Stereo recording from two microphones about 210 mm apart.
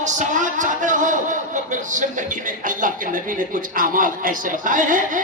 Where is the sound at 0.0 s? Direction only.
35° right (ahead or behind).